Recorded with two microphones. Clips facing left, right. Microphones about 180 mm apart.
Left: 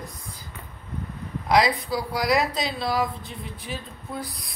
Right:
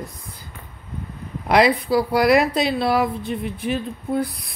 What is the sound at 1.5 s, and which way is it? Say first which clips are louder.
A woman's voice: right 5 dB; 60° right (ahead or behind).